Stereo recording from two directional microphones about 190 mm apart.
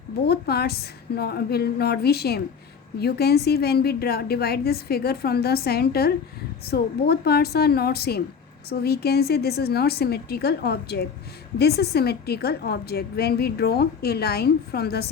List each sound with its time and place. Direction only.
0.3 s a woman's voice: 55° left (ahead or behind)